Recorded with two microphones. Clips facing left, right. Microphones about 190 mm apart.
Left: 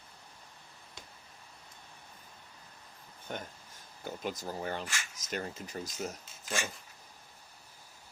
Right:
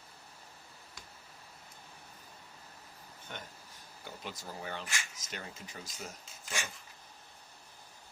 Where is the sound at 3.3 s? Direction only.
40° left (ahead or behind).